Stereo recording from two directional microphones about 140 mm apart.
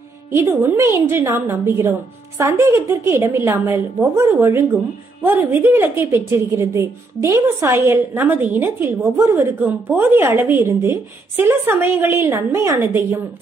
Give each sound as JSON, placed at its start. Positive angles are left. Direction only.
{"t": 0.3, "sound": "a woman's voice", "side_deg": -20}